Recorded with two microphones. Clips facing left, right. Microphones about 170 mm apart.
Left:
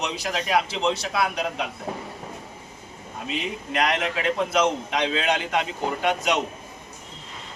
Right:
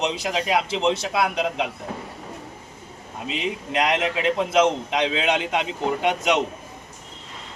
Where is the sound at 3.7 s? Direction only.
20° right (ahead or behind).